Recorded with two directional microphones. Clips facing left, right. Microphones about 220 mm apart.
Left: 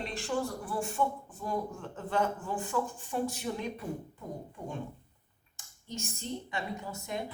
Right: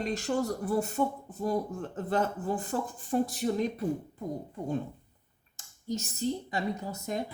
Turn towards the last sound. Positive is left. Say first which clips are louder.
# right 3 dB
turn(degrees=-40)  # may be behind; listen again after turning